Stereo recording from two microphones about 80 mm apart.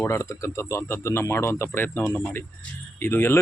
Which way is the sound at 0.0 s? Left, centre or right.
Left.